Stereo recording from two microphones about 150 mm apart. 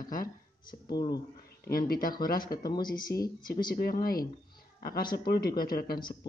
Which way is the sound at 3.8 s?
85° left.